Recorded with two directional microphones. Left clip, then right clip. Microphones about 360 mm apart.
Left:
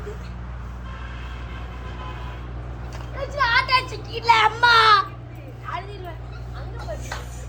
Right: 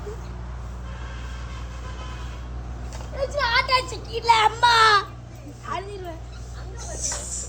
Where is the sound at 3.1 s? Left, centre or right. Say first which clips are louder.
Left 2 dB; right.